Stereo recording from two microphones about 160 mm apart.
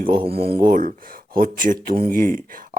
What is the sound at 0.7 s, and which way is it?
Speech, 60° right (ahead or behind).